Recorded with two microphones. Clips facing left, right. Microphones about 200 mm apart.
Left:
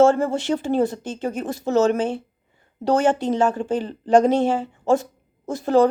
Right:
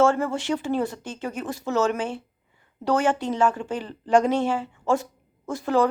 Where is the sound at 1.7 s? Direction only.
25° left (ahead or behind).